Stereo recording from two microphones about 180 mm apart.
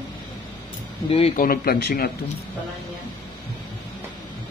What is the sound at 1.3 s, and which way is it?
Speech, 50° left (ahead or behind).